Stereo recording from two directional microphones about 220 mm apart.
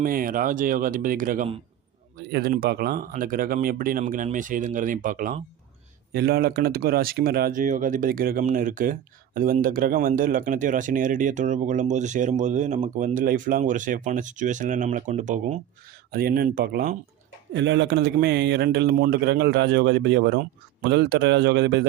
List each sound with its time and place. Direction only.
0.0 s speech: 40° right (ahead or behind)
17.5 s a man's voice: 55° right (ahead or behind)